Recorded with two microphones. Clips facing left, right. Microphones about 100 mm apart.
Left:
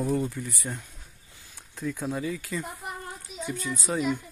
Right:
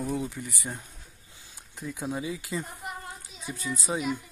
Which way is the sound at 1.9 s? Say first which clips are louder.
Even; 15° right (ahead or behind).